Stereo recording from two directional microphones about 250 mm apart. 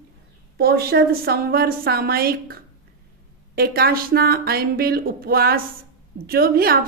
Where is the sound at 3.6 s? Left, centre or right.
Right.